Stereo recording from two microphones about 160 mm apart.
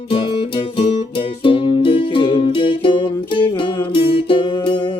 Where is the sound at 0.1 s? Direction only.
35° left (ahead or behind).